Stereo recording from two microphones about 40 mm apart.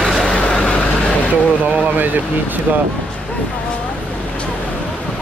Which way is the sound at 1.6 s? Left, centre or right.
Right.